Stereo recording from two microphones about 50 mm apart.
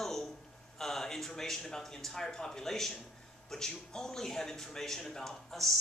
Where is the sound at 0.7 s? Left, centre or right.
Centre.